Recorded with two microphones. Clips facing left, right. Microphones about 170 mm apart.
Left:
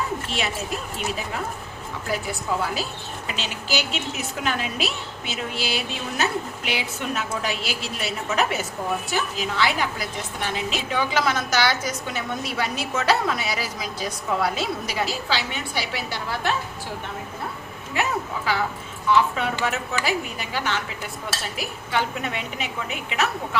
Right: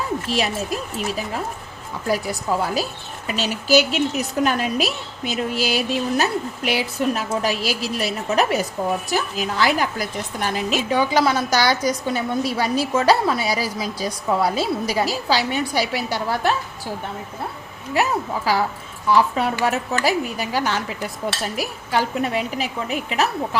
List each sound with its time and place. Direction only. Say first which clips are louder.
0.3 s a woman's voice: right 5 dB; 40° right (ahead or behind)
2.0 s a woman's voice: right 5 dB; 40° right (ahead or behind)
17.9 s a woman's voice: right 5 dB; 40° right (ahead or behind)
19.6 s a woman's voice: right 5 dB; 40° right (ahead or behind)